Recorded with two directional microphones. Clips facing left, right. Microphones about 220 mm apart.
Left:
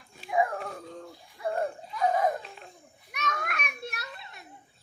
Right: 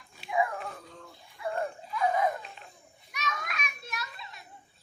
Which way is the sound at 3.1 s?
55° left (ahead or behind).